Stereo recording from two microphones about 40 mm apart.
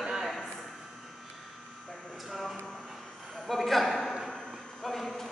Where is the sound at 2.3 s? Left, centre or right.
Centre.